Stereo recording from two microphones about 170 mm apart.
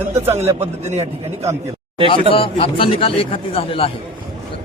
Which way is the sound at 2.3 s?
35° left (ahead or behind).